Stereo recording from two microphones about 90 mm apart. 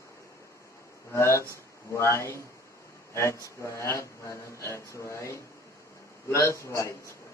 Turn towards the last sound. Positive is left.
turn(degrees=35)  # may be behind; listen again after turning